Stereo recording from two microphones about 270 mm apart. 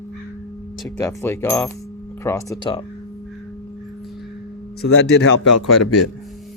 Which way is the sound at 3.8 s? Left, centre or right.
Centre.